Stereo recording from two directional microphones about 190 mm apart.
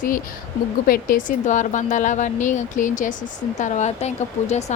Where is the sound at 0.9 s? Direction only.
45° left (ahead or behind).